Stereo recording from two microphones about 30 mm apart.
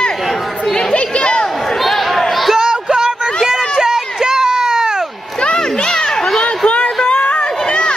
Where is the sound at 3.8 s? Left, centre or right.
Right.